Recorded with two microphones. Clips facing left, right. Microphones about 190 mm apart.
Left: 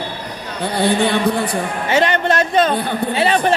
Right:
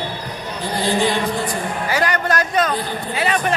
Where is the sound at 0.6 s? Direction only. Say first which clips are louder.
Left 3 dB; 65° left (ahead or behind).